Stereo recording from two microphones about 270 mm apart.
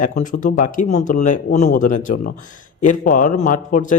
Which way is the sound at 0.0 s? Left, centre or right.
Left.